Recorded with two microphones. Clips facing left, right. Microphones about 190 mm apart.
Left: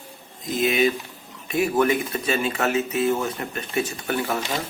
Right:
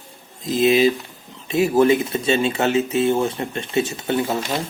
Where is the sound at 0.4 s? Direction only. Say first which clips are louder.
Right 5 dB; 25° right (ahead or behind).